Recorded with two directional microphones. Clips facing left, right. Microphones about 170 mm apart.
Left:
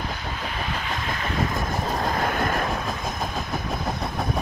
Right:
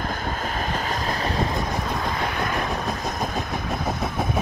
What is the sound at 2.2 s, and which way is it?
Train, 50° left (ahead or behind).